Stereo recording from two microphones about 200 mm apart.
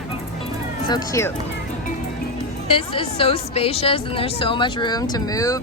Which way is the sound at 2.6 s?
25° left (ahead or behind).